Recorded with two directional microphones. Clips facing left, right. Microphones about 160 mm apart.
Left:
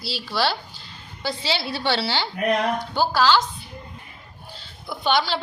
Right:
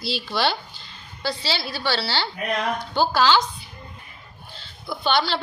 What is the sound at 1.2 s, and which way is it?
A woman's voice, 15° left (ahead or behind).